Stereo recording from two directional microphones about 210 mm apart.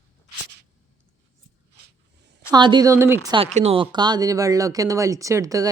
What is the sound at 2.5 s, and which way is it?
Speech, 20° right (ahead or behind).